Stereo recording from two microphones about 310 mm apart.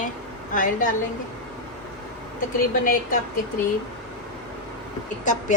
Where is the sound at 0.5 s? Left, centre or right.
Left.